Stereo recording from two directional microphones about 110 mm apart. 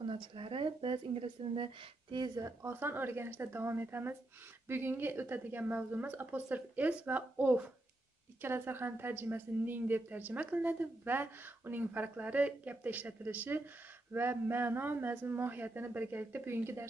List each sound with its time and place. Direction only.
0.0 s speech: 50° right (ahead or behind)
2.3 s a woman's voice: 30° right (ahead or behind)
2.7 s a man's voice: 20° right (ahead or behind)